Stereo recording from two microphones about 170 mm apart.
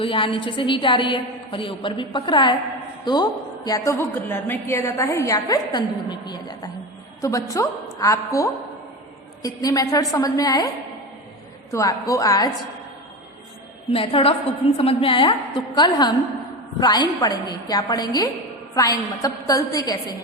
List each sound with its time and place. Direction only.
0.0 s a woman's voice: 30° left (ahead or behind)
11.7 s a woman's voice: 20° left (ahead or behind)
13.9 s a woman's voice: 30° left (ahead or behind)